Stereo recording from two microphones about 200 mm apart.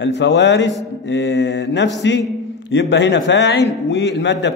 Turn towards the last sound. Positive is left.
turn(degrees=65)  # may be behind; listen again after turning